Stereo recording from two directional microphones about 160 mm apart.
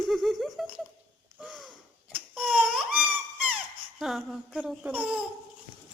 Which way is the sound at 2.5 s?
10° right (ahead or behind).